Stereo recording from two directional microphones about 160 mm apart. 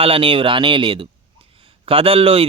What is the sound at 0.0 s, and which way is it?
A man's voice, 35° right (ahead or behind).